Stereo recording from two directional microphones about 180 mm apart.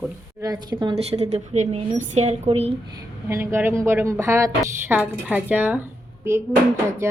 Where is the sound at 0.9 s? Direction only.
35° right (ahead or behind).